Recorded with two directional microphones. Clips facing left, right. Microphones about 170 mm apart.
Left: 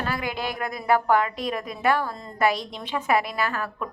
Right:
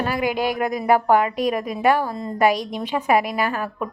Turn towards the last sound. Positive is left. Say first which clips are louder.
# right 4 dB
turn(degrees=-15)  # may be behind; listen again after turning